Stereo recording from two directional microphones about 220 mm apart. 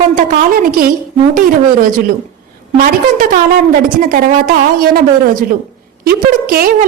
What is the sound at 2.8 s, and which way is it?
A woman's voice, 40° right (ahead or behind).